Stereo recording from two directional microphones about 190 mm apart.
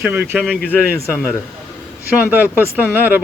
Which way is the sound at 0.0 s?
10° right (ahead or behind).